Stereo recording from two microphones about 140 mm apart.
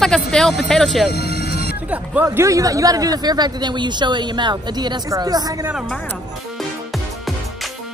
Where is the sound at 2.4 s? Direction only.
25° right (ahead or behind).